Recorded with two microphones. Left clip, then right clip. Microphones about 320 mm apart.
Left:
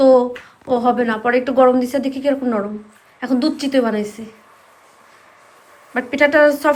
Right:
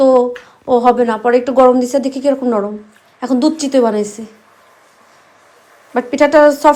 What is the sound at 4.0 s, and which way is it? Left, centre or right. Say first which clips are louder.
Speech: right 5 dB; right.